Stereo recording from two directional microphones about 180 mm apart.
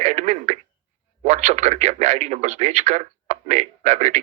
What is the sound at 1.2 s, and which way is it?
Speech, 40° right (ahead or behind).